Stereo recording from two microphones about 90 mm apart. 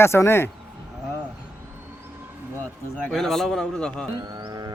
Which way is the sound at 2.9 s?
5° left (ahead or behind).